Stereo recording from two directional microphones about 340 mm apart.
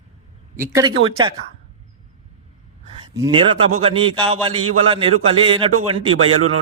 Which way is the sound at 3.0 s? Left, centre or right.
Centre.